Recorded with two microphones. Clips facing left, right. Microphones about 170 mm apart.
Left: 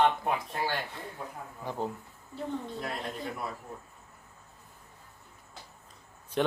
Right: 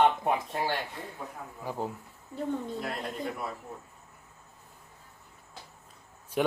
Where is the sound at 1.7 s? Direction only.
5° right (ahead or behind).